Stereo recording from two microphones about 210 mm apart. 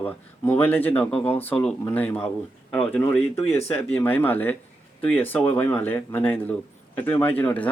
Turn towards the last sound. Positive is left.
turn(degrees=10)  # may be behind; listen again after turning